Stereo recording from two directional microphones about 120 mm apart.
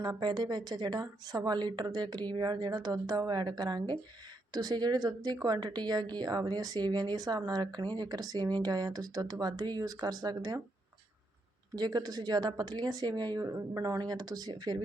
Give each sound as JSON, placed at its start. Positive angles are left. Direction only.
{"t": 0.0, "sound": "a woman's voice", "side_deg": -35}
{"t": 11.7, "sound": "a woman's voice", "side_deg": -35}